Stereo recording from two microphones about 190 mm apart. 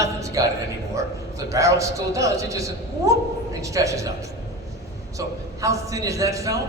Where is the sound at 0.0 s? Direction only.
15° right (ahead or behind).